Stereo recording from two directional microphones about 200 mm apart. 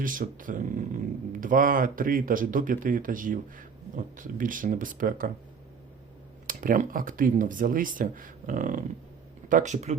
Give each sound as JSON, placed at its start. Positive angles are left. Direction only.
{"t": 0.0, "sound": "speech", "side_deg": -40}
{"t": 6.5, "sound": "speech", "side_deg": -40}